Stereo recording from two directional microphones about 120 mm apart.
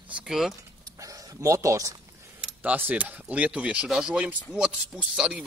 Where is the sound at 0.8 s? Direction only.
30° right (ahead or behind).